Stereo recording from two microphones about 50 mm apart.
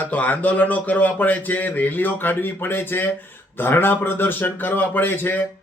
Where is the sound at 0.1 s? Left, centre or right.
Left.